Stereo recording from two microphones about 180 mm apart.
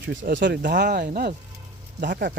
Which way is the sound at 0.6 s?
65° right (ahead or behind).